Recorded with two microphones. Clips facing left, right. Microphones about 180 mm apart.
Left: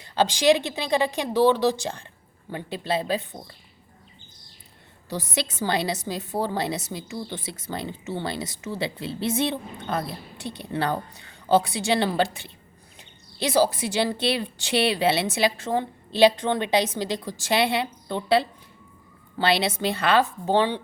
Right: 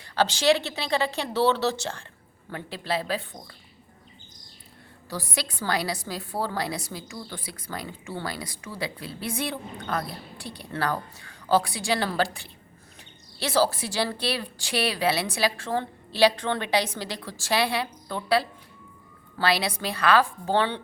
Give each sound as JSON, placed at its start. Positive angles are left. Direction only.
{"t": 0.0, "sound": "a woman's voice", "side_deg": 20}
{"t": 5.0, "sound": "a woman's voice", "side_deg": 20}